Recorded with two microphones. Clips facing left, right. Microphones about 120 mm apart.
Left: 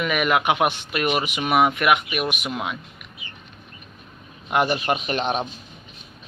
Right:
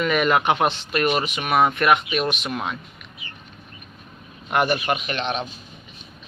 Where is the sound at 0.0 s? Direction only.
10° left (ahead or behind).